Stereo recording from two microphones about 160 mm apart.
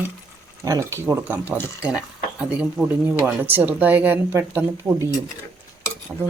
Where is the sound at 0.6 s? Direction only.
20° right (ahead or behind).